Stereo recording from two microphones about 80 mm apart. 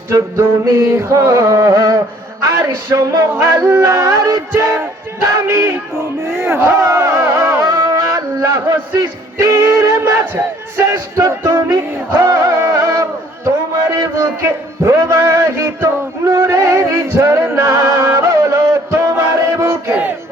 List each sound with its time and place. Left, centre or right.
0.1 s music: right
2.4 s a sound: right
3.7 s music: right
4.6 s a sound: right
11.4 s speech: right
12.2 s music: right
14.4 s a sound: right
16.3 s music: right
19.9 s crowd: right